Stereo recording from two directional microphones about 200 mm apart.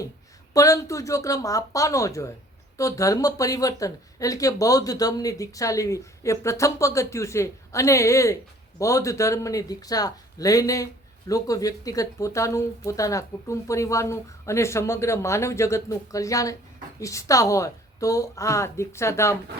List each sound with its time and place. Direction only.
0.5 s speech: 15° left (ahead or behind)